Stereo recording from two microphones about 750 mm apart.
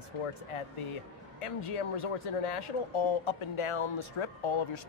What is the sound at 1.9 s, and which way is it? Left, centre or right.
Speech, left.